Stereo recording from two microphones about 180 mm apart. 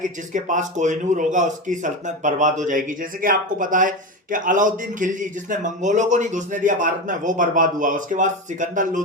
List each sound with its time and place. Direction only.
0.0 s a man's voice: 45° right (ahead or behind)